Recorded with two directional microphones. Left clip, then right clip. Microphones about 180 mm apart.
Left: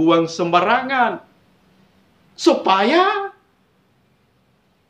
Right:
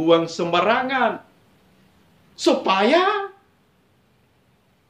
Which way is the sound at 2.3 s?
20° left (ahead or behind).